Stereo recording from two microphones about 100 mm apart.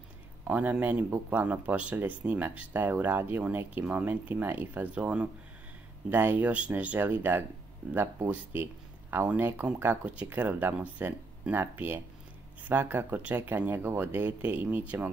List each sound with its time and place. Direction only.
0.5 s speech: 15° right (ahead or behind)